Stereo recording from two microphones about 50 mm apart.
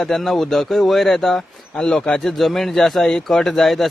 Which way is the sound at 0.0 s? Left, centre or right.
Centre.